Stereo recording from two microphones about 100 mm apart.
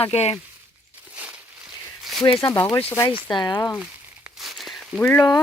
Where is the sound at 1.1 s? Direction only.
15° right (ahead or behind).